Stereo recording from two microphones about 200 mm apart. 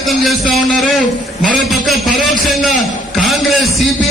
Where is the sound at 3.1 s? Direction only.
Centre (ahead or behind).